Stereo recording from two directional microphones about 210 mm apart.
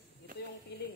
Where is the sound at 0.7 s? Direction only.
50° left (ahead or behind).